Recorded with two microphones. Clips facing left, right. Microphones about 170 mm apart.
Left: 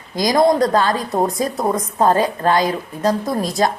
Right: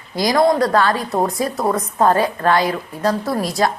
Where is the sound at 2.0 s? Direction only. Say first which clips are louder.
Even; 20° left (ahead or behind).